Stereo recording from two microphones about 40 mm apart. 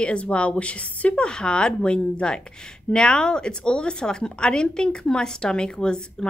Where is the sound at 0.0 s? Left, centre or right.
Left.